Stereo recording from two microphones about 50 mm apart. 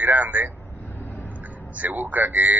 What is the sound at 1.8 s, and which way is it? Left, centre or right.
Speech, right.